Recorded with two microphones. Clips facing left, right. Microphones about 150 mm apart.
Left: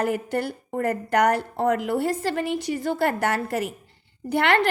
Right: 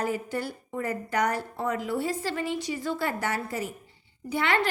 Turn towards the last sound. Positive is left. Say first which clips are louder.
# left 5 dB
turn(degrees=65)  # may be behind; listen again after turning